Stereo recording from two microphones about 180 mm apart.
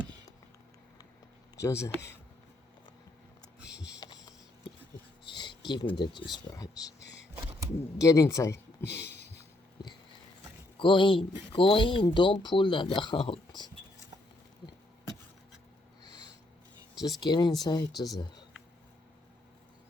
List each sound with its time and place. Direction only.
1.5 s speech: 15° left (ahead or behind)
3.9 s a sound: 20° left (ahead or behind)
7.9 s speech: 15° left (ahead or behind)
10.8 s speech: 25° left (ahead or behind)
17.2 s speech: 25° left (ahead or behind)
17.9 s speech: centre (ahead or behind)